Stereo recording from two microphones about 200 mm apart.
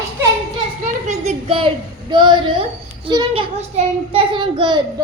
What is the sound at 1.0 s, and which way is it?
A child's voice, 35° right (ahead or behind).